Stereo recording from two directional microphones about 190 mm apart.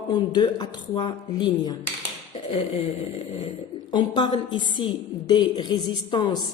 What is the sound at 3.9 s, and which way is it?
A woman's voice, 25° left (ahead or behind).